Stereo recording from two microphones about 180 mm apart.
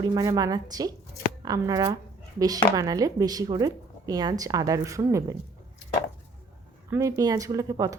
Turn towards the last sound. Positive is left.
turn(degrees=-20)  # may be behind; listen again after turning